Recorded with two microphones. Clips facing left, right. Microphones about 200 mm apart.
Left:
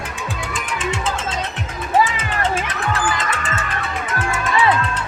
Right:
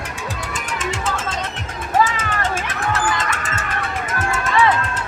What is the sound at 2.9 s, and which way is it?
Music, 45° right (ahead or behind).